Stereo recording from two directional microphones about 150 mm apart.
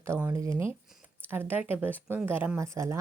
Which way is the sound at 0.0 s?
15° right (ahead or behind).